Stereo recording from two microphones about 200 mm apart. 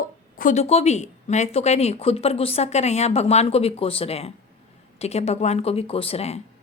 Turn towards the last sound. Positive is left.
turn(degrees=30)  # may be behind; listen again after turning